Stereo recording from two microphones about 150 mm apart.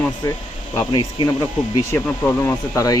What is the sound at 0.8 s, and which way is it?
Speech, 30° left (ahead or behind).